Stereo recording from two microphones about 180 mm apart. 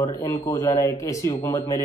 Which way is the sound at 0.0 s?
20° left (ahead or behind).